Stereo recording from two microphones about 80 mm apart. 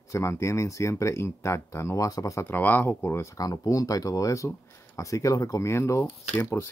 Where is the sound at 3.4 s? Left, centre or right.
Left.